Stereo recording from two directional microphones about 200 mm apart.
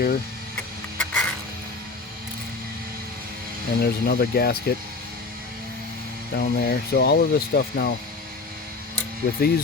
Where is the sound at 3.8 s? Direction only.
55° left (ahead or behind).